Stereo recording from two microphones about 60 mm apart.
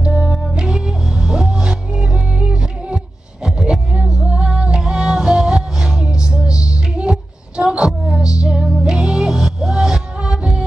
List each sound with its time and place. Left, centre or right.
0.0 s music: centre